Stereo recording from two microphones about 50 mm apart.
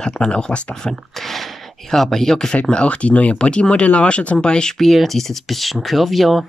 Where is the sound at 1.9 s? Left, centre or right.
Centre.